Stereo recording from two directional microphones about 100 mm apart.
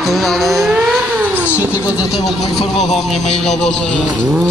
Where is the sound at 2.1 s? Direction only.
Centre (ahead or behind).